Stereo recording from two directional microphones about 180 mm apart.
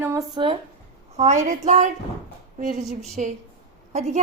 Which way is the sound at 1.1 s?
40° right (ahead or behind).